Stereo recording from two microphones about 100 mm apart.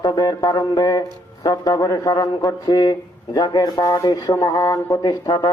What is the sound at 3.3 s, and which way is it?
Speech, 40° left (ahead or behind).